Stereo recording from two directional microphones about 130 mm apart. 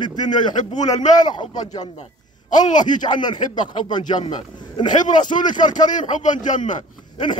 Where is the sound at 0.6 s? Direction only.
65° left (ahead or behind).